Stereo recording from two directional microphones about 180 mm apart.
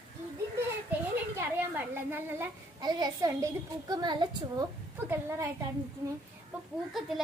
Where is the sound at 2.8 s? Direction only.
20° right (ahead or behind).